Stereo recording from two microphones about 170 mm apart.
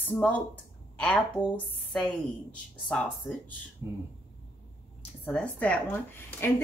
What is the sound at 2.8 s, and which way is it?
Speech, 5° left (ahead or behind).